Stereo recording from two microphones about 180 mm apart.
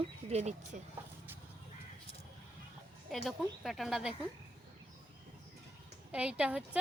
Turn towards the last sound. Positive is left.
turn(degrees=-5)  # may be behind; listen again after turning